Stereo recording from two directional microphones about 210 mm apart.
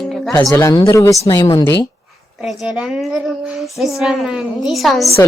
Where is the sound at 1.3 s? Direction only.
20° left (ahead or behind).